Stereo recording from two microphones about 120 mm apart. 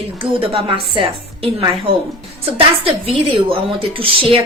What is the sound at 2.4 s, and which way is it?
A woman's voice, 55° right (ahead or behind).